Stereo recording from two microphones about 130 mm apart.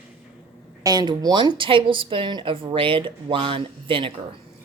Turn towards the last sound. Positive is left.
turn(degrees=-40)  # may be behind; listen again after turning